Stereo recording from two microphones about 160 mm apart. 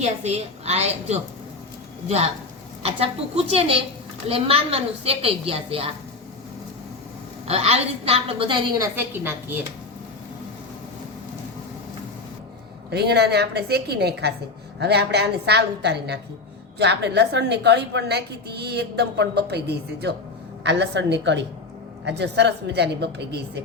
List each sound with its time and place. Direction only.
0.0 s a woman's voice: 45° right (ahead or behind)
7.4 s a woman's voice: 40° right (ahead or behind)
9.0 s a woman's voice: 15° right (ahead or behind)
12.9 s a woman's voice: 90° right